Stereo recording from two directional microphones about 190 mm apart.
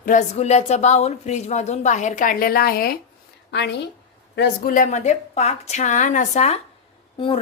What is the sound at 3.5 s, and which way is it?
A woman's voice, 65° left (ahead or behind).